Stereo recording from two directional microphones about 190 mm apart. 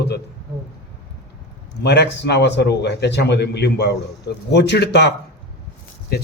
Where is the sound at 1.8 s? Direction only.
60° left (ahead or behind).